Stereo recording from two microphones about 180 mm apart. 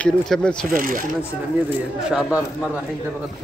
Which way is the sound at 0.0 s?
5° left (ahead or behind).